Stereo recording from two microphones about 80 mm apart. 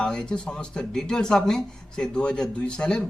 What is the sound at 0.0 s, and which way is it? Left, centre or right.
A man's voice, centre.